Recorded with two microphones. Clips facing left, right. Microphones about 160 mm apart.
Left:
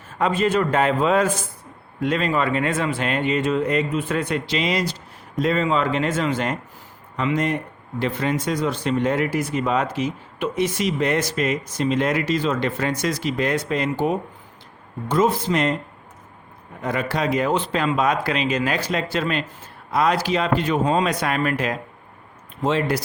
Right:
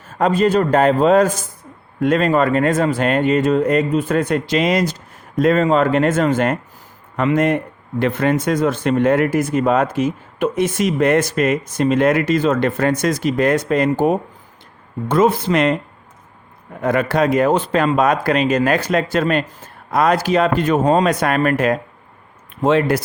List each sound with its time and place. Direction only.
0.2 s a man's voice: 40° right (ahead or behind)
15.0 s speech: 60° right (ahead or behind)
16.8 s a man's voice: 55° right (ahead or behind)